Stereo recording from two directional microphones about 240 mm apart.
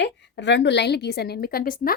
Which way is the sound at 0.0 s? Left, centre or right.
Left.